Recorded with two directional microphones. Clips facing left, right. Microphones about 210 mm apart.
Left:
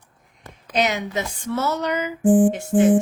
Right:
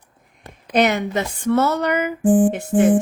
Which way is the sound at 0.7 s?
55° right (ahead or behind).